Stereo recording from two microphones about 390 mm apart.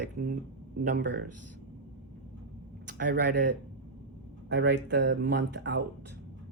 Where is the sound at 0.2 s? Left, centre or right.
Right.